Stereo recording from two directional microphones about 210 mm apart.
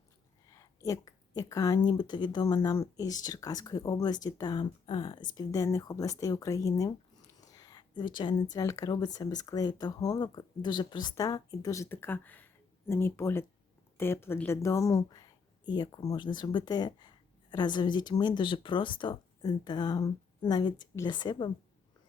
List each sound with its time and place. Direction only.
0.5 s a woman's voice: 15° left (ahead or behind)
7.4 s a sound: 15° left (ahead or behind)
8.5 s a woman's voice: 15° left (ahead or behind)